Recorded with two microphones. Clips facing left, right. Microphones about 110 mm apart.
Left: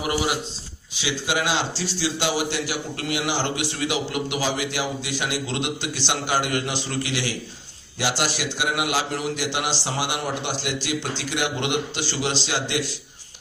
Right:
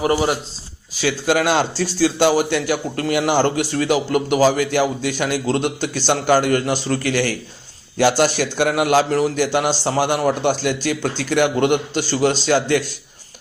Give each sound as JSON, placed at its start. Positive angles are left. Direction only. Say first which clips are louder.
{"t": 0.0, "sound": "a man's voice", "louder": "right 7 dB", "side_deg": -40}
{"t": 1.0, "sound": "a man's voice", "louder": "right 7 dB", "side_deg": -50}